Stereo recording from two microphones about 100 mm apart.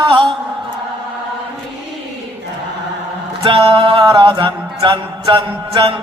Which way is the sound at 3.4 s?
65° right (ahead or behind).